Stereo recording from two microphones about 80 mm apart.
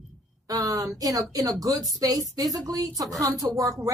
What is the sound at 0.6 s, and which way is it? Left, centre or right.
Speech, right.